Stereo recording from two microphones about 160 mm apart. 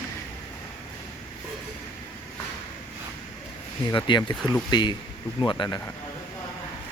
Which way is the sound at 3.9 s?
30° left (ahead or behind).